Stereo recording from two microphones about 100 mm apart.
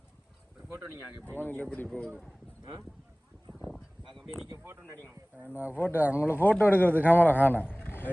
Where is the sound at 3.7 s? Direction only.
Centre (ahead or behind).